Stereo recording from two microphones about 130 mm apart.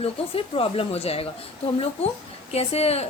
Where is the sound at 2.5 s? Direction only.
50° left (ahead or behind).